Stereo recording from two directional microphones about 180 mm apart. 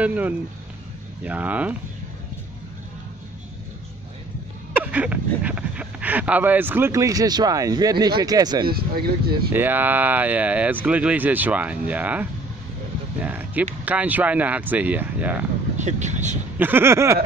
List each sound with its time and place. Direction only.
0.0 s speech: 10° right (ahead or behind)
4.7 s speech: 10° right (ahead or behind)
8.6 s speech: 55° right (ahead or behind)
9.5 s speech: 10° right (ahead or behind)
15.8 s speech: 40° right (ahead or behind)
16.5 s speech: 10° right (ahead or behind)